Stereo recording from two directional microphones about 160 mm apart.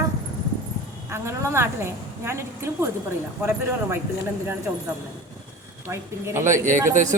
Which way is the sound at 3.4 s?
15° right (ahead or behind).